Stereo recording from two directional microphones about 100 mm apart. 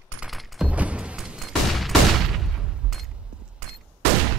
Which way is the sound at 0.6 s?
15° right (ahead or behind).